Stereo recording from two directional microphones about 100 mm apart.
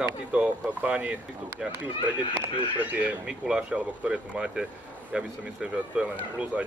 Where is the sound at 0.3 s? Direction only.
10° right (ahead or behind).